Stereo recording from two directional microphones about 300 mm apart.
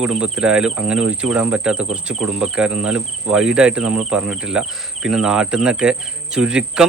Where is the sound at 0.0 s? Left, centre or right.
Centre.